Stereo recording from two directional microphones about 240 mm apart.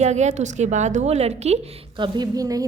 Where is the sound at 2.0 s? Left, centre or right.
Centre.